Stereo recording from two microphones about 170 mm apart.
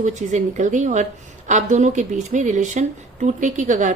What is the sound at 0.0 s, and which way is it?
A woman's voice, 45° right (ahead or behind).